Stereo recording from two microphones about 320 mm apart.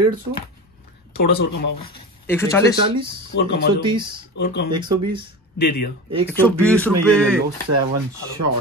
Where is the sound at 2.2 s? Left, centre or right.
Centre.